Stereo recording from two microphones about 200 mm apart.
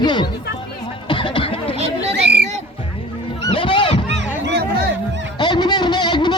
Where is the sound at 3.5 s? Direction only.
25° left (ahead or behind).